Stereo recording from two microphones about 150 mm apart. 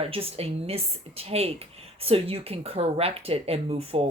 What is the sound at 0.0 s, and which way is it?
A woman's voice, 40° right (ahead or behind).